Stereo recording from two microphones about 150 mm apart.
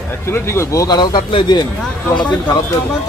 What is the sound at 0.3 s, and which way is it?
Speech, 15° left (ahead or behind).